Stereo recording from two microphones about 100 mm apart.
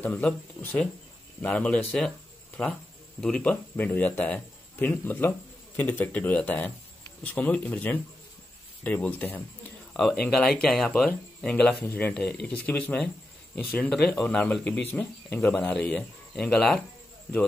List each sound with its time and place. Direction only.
0.0 s speech: 20° left (ahead or behind)
9.9 s speech: 5° left (ahead or behind)
11.8 s speech: 20° left (ahead or behind)
15.7 s speech: 5° left (ahead or behind)